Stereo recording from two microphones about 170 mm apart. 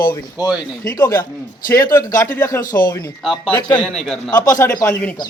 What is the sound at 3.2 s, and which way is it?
A man's voice, centre (ahead or behind).